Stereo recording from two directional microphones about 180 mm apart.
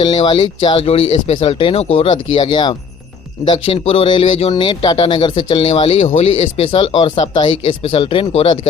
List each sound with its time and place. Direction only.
0.0 s speech: 35° left (ahead or behind)
3.5 s speech: 35° left (ahead or behind)